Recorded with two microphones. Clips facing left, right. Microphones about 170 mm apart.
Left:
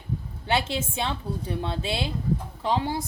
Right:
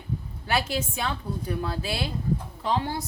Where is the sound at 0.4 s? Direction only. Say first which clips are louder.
Left 1 dB; 25° left (ahead or behind).